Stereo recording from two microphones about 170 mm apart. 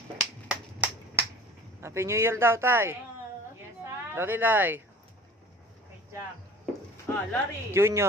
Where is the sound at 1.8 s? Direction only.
15° right (ahead or behind).